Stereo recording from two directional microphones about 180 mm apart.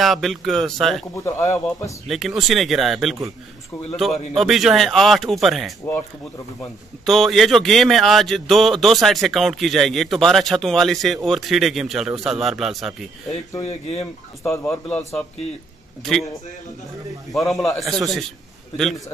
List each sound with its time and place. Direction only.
0.0 s speech: centre (ahead or behind)
1.1 s speech: 15° left (ahead or behind)
2.0 s speech: centre (ahead or behind)
4.3 s speech: centre (ahead or behind)
7.1 s speech: centre (ahead or behind)
13.9 s speech: 15° left (ahead or behind)
16.0 s speech: centre (ahead or behind)
17.3 s speech: centre (ahead or behind)